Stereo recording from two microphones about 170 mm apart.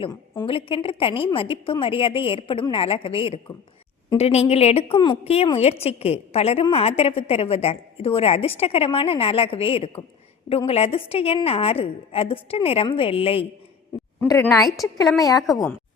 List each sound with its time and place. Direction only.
0.0 s a woman's voice: 25° left (ahead or behind)
14.2 s a woman's voice: 15° left (ahead or behind)